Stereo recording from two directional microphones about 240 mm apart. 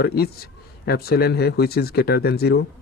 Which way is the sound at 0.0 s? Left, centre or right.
Left.